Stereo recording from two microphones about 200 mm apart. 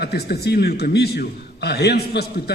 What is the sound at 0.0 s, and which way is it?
A man's voice, 55° left (ahead or behind).